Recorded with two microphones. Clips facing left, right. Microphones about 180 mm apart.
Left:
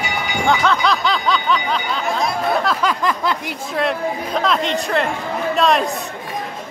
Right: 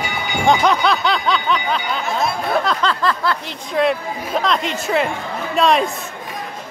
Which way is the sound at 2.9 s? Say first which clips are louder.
Even; 15° left (ahead or behind).